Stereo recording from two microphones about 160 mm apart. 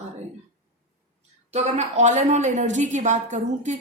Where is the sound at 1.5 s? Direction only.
45° right (ahead or behind).